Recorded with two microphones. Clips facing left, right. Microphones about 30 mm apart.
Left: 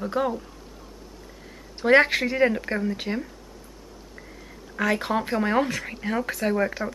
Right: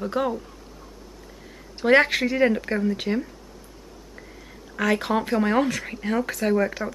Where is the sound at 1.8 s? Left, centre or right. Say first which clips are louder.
Even; centre.